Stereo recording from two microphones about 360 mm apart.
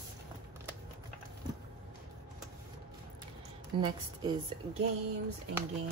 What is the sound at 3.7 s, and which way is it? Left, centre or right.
Speech, centre.